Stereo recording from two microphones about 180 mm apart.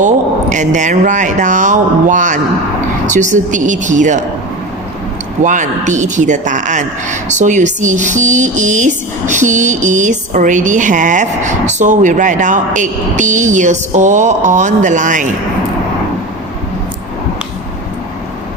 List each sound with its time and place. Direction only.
0.5 s speech: 40° right (ahead or behind)
5.4 s speech: 45° right (ahead or behind)